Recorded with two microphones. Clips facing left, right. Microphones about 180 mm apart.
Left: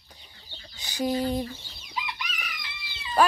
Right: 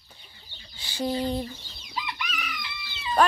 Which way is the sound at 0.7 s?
15° left (ahead or behind).